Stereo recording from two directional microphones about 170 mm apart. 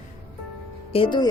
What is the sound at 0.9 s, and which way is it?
Speech, 30° left (ahead or behind).